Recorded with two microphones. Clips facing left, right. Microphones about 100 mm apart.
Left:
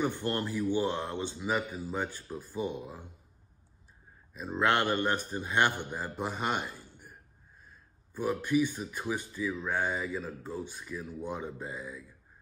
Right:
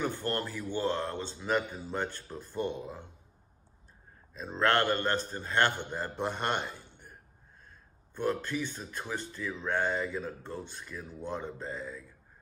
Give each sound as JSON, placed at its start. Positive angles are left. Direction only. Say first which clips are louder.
{"t": 0.0, "sound": "speech", "louder": "left 1 dB", "side_deg": 15}
{"t": 1.5, "sound": "speech", "louder": "right 2 dB", "side_deg": 5}
{"t": 4.3, "sound": "speech", "louder": "even", "side_deg": 10}